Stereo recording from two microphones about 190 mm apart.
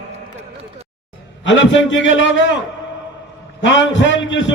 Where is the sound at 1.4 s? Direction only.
80° left.